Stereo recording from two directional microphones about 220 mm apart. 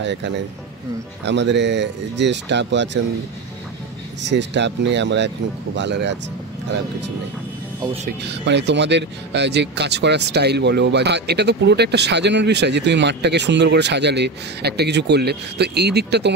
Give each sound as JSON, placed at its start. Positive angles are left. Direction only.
{"t": 0.0, "sound": "speech", "side_deg": -55}
{"t": 4.2, "sound": "speech", "side_deg": -55}
{"t": 7.8, "sound": "speech", "side_deg": -25}
{"t": 8.3, "sound": "speech", "side_deg": -50}